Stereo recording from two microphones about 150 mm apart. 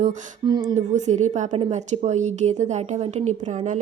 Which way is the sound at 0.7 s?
50° right (ahead or behind).